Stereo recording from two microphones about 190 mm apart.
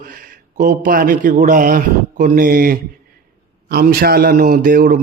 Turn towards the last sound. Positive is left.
turn(degrees=-50)  # may be behind; listen again after turning